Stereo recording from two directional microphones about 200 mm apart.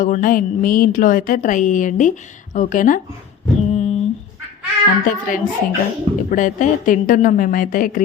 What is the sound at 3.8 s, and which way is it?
Humming, 30° left (ahead or behind).